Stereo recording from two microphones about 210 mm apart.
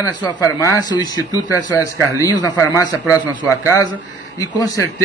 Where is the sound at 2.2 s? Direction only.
20° left (ahead or behind).